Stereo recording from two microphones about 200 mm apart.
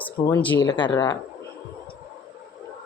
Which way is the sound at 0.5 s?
25° left (ahead or behind).